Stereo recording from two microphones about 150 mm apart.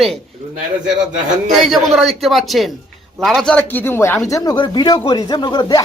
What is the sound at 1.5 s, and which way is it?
Speech, centre (ahead or behind).